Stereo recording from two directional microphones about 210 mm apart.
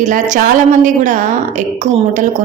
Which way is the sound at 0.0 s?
35° right (ahead or behind).